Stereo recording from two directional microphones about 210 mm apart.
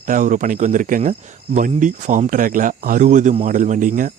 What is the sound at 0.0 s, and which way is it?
Speech, 40° right (ahead or behind).